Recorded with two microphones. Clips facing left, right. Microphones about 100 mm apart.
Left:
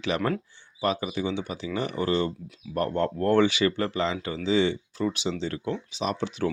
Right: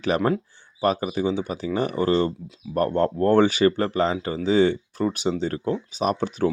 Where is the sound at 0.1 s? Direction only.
40° right (ahead or behind).